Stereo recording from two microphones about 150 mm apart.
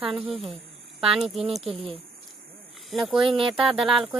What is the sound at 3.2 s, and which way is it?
Speech, 35° right (ahead or behind).